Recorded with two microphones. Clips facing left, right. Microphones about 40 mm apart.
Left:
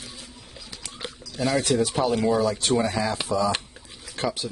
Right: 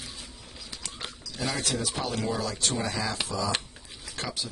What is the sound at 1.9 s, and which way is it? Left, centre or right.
Speech, centre.